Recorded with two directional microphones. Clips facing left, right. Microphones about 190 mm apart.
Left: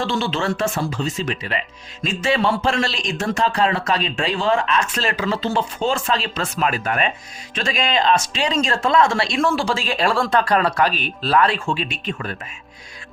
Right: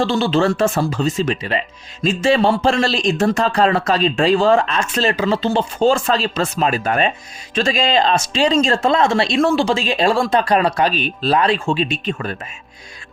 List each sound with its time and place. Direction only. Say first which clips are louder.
0.0 s speech: right 6 dB; 35° right (ahead or behind)